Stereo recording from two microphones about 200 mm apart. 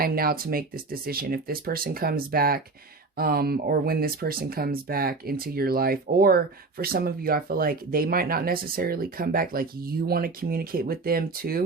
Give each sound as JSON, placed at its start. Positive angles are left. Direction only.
{"t": 0.0, "sound": "speech", "side_deg": -50}